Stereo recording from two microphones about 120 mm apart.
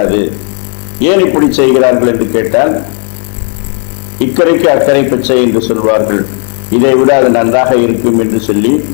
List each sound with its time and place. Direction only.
0.0 s a man's voice: 15° left (ahead or behind)
4.4 s a man's voice: 15° left (ahead or behind)